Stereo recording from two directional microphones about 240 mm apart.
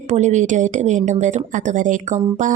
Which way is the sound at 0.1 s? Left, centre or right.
Right.